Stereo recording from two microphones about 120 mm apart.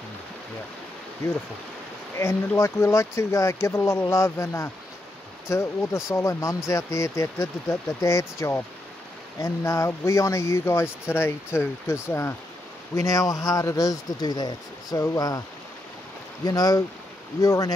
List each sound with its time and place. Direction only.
2.1 s speech: 25° left (ahead or behind)
16.4 s speech: 30° left (ahead or behind)